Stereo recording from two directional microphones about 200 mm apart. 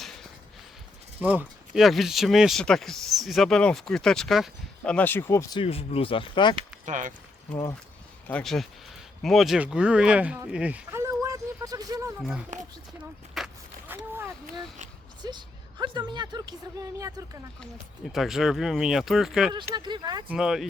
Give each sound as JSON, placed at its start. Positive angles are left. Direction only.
{"t": 1.2, "sound": "speech", "side_deg": -10}
{"t": 6.6, "sound": "speech", "side_deg": -40}
{"t": 8.3, "sound": "speech", "side_deg": 5}
{"t": 12.2, "sound": "speech", "side_deg": -5}
{"t": 13.3, "sound": "a sound", "side_deg": -5}
{"t": 15.2, "sound": "a woman's voice", "side_deg": -20}
{"t": 18.1, "sound": "speech", "side_deg": 0}
{"t": 19.7, "sound": "a woman's voice", "side_deg": -20}
{"t": 20.2, "sound": "speech", "side_deg": -5}